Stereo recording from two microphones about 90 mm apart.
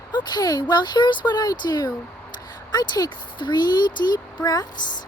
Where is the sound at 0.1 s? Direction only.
55° left (ahead or behind).